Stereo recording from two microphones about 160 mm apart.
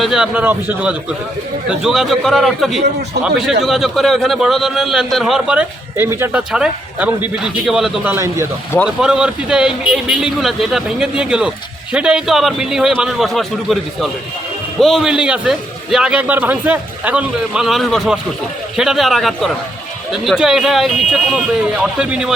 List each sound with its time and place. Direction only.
0.0 s a man's voice: 5° right (ahead or behind)
8.1 s a man's voice: 15° right (ahead or behind)
9.0 s a man's voice: 5° right (ahead or behind)